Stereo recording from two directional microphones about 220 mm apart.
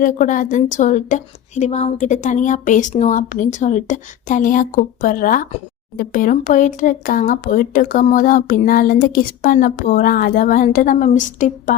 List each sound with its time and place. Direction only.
0.0 s speech: 35° left (ahead or behind)